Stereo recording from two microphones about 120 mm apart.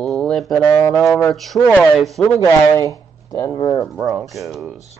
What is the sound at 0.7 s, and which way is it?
Speech, 25° left (ahead or behind).